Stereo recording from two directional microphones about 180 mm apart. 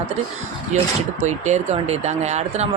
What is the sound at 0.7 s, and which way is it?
Speech, 40° right (ahead or behind).